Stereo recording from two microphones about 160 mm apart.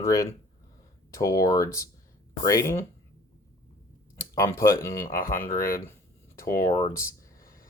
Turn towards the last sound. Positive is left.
turn(degrees=35)  # may be behind; listen again after turning